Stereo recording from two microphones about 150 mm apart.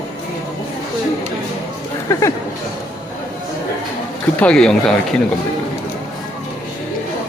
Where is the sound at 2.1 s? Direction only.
20° left (ahead or behind).